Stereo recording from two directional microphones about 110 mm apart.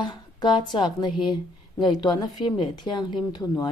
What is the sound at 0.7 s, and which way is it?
A woman's voice, 45° left (ahead or behind).